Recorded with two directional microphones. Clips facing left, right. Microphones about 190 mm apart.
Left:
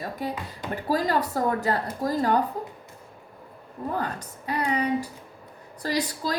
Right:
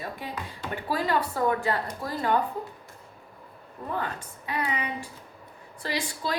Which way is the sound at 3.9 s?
40° left (ahead or behind).